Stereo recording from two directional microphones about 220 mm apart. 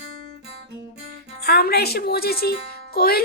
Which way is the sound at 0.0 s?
80° right.